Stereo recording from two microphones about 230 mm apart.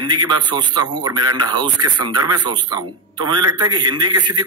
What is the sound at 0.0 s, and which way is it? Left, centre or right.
A man's voice, centre.